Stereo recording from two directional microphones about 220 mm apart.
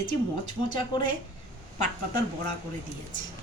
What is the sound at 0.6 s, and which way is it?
Speech, 20° left (ahead or behind).